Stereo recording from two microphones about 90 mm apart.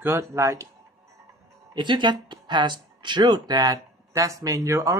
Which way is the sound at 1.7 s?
60° right (ahead or behind).